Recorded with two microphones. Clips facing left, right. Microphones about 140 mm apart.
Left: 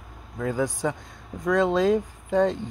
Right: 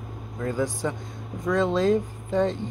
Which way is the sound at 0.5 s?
10° left (ahead or behind).